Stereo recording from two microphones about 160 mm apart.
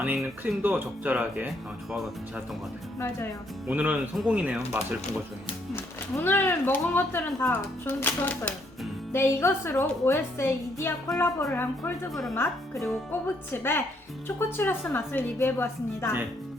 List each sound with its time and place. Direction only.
0.0 s speech: 10° right (ahead or behind)
3.7 s speech: 10° right (ahead or behind)
5.7 s speech: 15° left (ahead or behind)
13.1 s speech: 15° left (ahead or behind)